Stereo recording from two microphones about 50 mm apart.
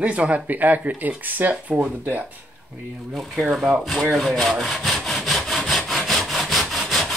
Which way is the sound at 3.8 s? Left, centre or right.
Centre.